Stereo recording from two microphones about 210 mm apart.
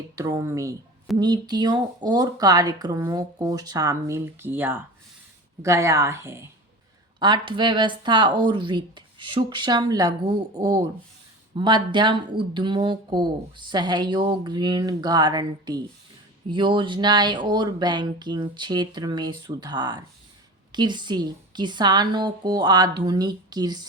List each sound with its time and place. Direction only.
0.2 s speech: 15° right (ahead or behind)